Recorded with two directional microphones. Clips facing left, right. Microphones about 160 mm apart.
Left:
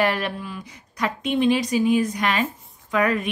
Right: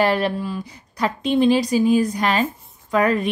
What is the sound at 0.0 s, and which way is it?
A woman's voice, 30° right (ahead or behind).